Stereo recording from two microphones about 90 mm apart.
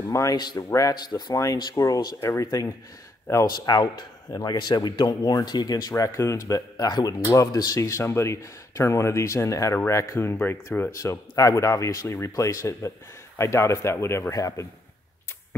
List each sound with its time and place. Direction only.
0.1 s speech: 40° left (ahead or behind)
1.3 s speech: 40° left (ahead or behind)
10.1 s speech: 25° left (ahead or behind)
10.9 s speech: 35° left (ahead or behind)
14.3 s speech: 40° left (ahead or behind)